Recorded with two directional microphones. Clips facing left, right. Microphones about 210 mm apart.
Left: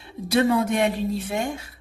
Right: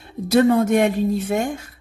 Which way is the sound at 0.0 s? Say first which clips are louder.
Right 5 dB; 45° right (ahead or behind).